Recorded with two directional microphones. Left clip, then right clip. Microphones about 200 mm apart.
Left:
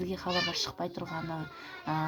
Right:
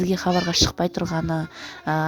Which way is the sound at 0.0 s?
45° right (ahead or behind).